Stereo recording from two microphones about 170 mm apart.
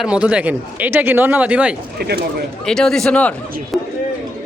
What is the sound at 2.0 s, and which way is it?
Speech, 70° right (ahead or behind).